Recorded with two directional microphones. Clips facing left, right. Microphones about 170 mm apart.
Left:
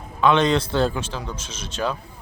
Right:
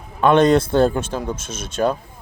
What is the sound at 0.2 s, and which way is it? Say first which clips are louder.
Speech: right 5 dB; 50° right (ahead or behind).